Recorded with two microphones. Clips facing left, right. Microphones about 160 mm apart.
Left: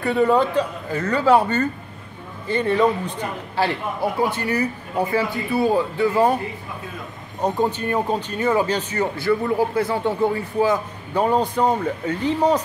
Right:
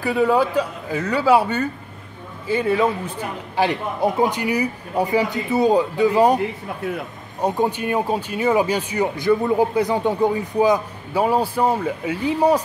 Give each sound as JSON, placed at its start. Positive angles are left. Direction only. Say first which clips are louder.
{"t": 0.0, "sound": "a man's voice", "louder": "even", "side_deg": -5}
{"t": 3.5, "sound": "speech", "louder": "right 2 dB", "side_deg": -20}
{"t": 7.4, "sound": "speech", "louder": "right 1 dB", "side_deg": -10}